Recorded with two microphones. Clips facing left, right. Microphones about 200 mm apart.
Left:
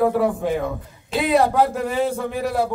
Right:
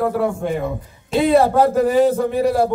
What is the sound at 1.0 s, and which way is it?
Speech, 30° right (ahead or behind).